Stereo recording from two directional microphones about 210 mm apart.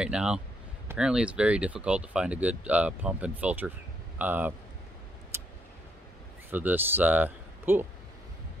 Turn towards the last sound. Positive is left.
turn(degrees=-10)  # may be behind; listen again after turning